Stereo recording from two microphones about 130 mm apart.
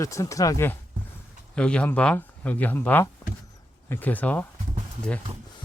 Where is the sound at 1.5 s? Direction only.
10° left (ahead or behind).